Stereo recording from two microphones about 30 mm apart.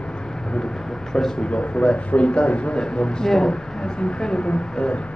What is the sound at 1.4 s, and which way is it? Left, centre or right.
Speech, left.